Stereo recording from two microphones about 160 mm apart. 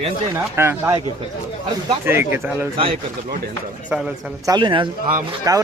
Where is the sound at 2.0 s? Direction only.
15° right (ahead or behind).